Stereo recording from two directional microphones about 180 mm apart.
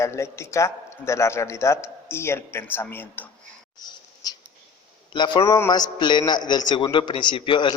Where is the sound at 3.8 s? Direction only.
20° left (ahead or behind).